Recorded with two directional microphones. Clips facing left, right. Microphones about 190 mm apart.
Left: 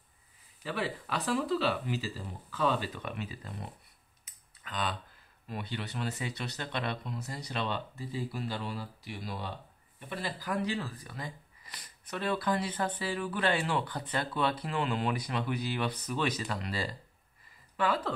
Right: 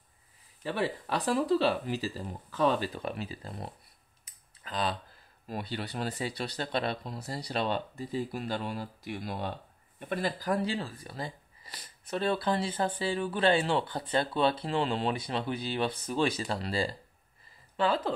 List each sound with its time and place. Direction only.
0.7 s speech: 35° right (ahead or behind)